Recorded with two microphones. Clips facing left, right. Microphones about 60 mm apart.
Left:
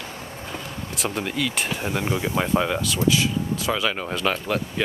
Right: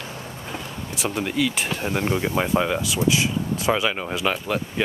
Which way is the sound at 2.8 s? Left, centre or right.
Centre.